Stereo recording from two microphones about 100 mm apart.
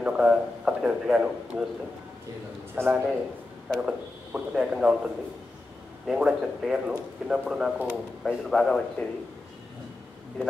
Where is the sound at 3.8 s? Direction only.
10° right (ahead or behind).